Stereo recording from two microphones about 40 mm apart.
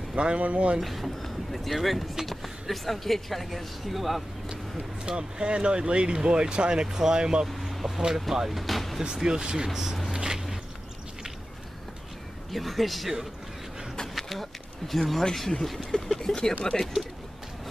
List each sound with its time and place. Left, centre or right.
0.1 s speech: right
0.7 s a woman's voice: centre
5.0 s speech: right
7.4 s a woman's voice: centre
9.0 s speech: centre
10.1 s a sound: centre
12.4 s a woman's voice: centre
14.0 s a sound: centre
15.6 s a woman's voice: centre
15.9 s speech: centre